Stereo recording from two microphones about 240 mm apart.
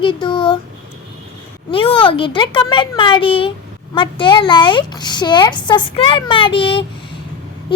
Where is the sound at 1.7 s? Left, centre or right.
Left.